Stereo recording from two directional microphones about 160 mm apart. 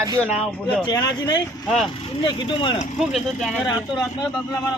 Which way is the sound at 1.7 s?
Centre (ahead or behind).